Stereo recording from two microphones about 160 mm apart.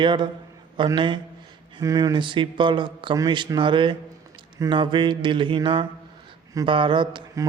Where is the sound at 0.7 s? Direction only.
30° right (ahead or behind).